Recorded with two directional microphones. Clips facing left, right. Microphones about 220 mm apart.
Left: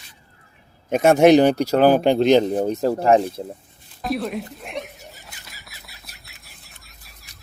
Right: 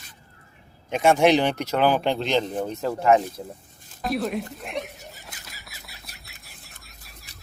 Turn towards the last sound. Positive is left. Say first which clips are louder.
# right 2 dB
turn(degrees=0)  # may be behind; listen again after turning